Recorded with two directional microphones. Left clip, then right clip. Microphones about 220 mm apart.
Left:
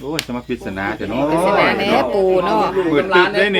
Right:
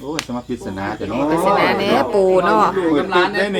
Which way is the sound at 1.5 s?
5° right (ahead or behind).